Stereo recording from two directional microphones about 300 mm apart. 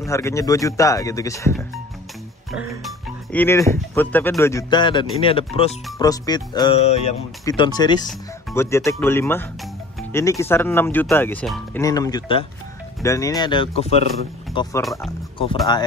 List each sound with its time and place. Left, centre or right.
0.0 s speech: centre
2.5 s speech: centre
14.8 s speech: centre